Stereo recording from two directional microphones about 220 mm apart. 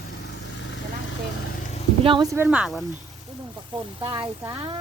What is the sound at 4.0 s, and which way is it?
Speech, 20° right (ahead or behind).